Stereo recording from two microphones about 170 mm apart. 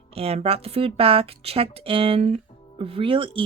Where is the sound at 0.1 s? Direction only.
35° right (ahead or behind).